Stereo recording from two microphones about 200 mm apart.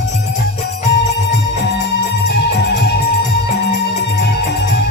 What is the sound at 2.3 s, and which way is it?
Music, 55° left (ahead or behind).